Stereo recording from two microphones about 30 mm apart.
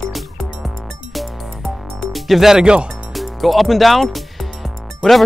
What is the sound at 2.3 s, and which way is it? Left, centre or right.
Speech, centre.